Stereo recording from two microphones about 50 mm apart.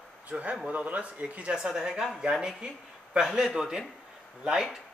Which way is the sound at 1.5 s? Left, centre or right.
Centre.